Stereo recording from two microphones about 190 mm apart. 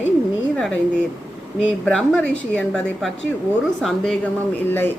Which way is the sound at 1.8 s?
5° left (ahead or behind).